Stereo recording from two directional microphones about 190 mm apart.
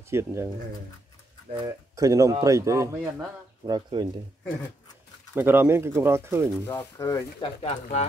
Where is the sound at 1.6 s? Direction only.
20° right (ahead or behind).